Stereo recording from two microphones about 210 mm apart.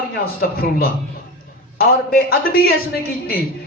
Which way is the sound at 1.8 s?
45° left (ahead or behind).